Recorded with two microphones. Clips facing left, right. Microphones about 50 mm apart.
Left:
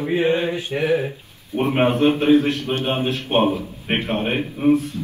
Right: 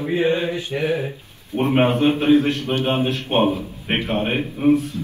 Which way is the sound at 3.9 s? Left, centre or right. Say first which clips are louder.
Even; centre.